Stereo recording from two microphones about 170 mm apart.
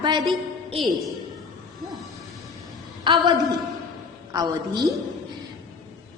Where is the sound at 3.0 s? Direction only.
25° right (ahead or behind).